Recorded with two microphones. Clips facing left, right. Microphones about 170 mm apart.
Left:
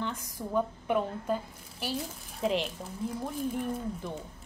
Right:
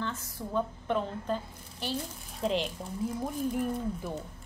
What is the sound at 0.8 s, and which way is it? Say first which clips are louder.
A woman's voice: left 2 dB; 10° left (ahead or behind).